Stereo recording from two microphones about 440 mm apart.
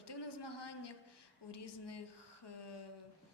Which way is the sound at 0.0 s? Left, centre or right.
Left.